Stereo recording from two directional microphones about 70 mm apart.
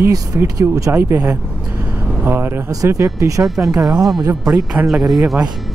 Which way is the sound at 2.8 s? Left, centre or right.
Right.